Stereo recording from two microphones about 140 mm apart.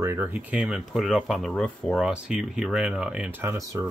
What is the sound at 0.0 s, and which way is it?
Speech, 15° right (ahead or behind).